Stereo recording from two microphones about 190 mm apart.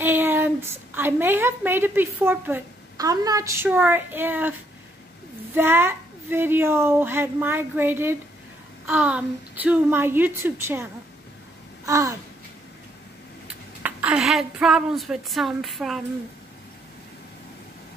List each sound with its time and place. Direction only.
0.0 s a woman's voice: 10° right (ahead or behind)
11.8 s a sound: 15° right (ahead or behind)
13.8 s speech: 5° right (ahead or behind)